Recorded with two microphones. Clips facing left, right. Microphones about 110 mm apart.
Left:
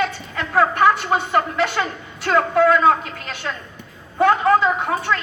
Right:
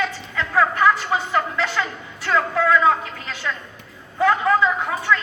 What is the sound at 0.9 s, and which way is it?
Speech, 65° left (ahead or behind).